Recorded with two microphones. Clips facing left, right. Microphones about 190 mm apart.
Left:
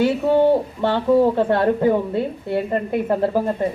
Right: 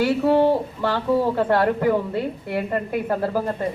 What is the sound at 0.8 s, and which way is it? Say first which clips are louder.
A woman's voice: left 5 dB; 25° left (ahead or behind).